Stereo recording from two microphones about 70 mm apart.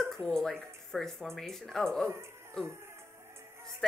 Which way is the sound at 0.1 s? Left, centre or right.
Centre.